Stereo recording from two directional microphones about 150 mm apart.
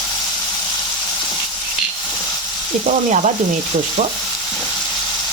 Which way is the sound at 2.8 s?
55° right (ahead or behind).